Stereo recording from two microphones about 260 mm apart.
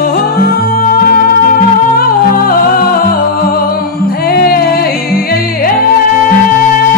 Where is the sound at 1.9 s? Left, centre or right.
Left.